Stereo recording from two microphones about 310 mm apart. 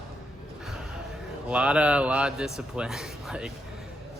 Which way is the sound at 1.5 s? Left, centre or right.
Centre.